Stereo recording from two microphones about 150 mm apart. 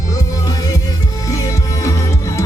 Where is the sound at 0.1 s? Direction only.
25° left (ahead or behind).